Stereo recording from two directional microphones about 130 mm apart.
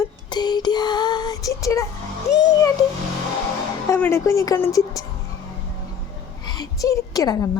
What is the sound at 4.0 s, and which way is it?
Speech, 20° left (ahead or behind).